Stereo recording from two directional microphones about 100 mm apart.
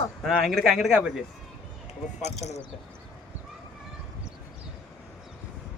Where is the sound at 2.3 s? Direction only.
90° left.